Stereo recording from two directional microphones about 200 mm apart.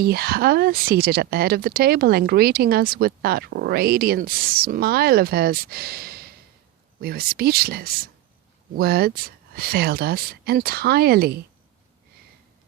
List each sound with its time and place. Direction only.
0.0 s speech: 50° right (ahead or behind)